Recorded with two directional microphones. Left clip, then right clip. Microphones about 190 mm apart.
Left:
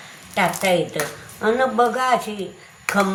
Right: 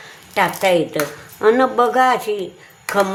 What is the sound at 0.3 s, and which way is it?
A woman's voice, 50° right (ahead or behind).